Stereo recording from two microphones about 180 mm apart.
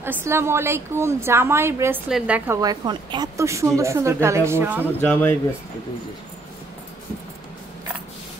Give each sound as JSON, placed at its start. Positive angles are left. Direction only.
{"t": 0.0, "sound": "a woman's voice", "side_deg": -15}
{"t": 5.0, "sound": "speech", "side_deg": 10}